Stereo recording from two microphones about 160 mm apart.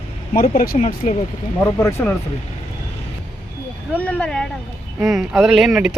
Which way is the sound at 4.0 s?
10° left (ahead or behind).